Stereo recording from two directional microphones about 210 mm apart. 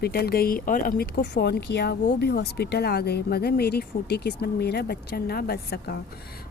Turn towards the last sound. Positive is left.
turn(degrees=50)  # may be behind; listen again after turning